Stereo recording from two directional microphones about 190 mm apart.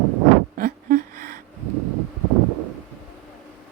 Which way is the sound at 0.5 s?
45° right (ahead or behind).